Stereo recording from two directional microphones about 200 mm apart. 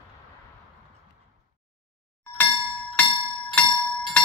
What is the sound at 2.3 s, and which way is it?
Music, 5° left (ahead or behind).